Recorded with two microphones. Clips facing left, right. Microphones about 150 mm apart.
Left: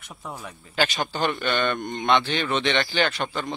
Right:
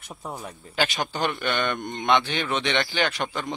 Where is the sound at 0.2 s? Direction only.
20° right (ahead or behind).